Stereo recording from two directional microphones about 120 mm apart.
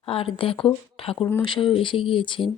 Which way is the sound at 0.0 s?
50° left (ahead or behind).